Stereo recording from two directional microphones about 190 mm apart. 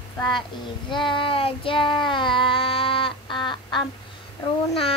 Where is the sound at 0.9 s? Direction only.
25° left (ahead or behind).